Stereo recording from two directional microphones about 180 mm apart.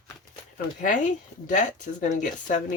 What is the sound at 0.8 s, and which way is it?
Speech, 45° left (ahead or behind).